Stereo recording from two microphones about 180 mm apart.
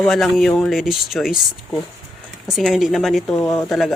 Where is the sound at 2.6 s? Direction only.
Centre (ahead or behind).